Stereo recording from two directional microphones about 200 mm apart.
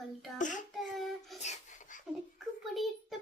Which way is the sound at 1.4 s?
35° left (ahead or behind).